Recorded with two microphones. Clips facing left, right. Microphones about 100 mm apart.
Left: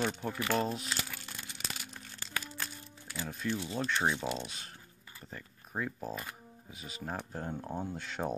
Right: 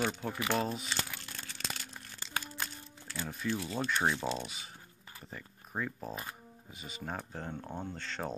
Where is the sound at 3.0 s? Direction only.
10° left (ahead or behind).